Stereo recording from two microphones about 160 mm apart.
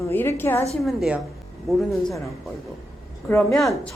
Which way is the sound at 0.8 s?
5° right (ahead or behind).